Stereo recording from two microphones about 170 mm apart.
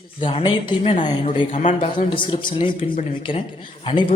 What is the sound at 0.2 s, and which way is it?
Speech, 30° left (ahead or behind).